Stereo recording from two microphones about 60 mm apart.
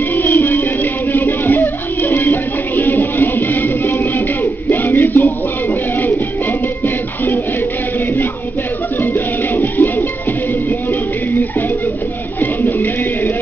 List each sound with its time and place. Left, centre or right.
0.1 s music: left
8.9 s music: left
10.7 s music: left
12.4 s bird: left